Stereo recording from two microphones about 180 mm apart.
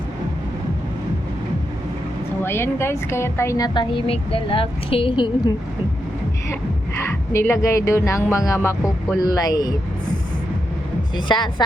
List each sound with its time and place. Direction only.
2.4 s speech: 15° left (ahead or behind)
6.5 s speech: 15° left (ahead or behind)
11.3 s speech: 25° left (ahead or behind)